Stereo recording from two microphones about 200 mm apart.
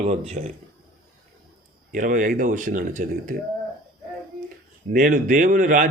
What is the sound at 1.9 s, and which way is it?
A man's voice, 40° right (ahead or behind).